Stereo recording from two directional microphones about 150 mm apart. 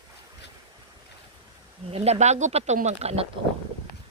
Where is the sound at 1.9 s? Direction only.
45° right (ahead or behind).